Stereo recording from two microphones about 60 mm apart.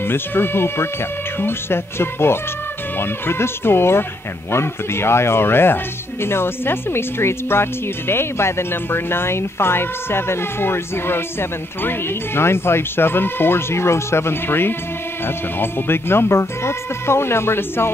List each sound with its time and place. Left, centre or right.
0.0 s speech: left
12.4 s speech: left